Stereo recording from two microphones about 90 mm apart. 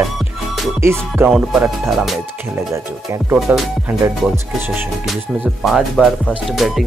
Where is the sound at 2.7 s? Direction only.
30° right (ahead or behind).